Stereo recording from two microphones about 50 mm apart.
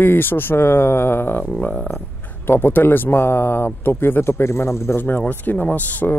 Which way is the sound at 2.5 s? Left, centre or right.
Left.